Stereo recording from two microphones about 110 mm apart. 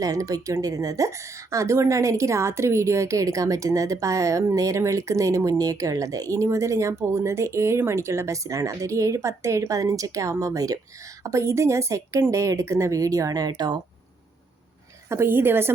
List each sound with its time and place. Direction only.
0.0 s a woman's voice: 30° right (ahead or behind)
15.1 s a woman's voice: 20° right (ahead or behind)